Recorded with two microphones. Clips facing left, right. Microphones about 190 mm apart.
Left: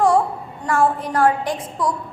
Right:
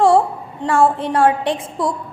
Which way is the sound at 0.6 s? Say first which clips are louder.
Right 3 dB; 25° right (ahead or behind).